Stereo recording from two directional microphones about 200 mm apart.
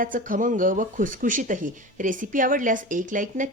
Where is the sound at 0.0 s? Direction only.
40° right (ahead or behind).